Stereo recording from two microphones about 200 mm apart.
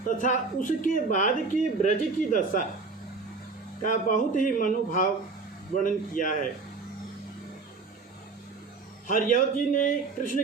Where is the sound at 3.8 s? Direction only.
40° left (ahead or behind).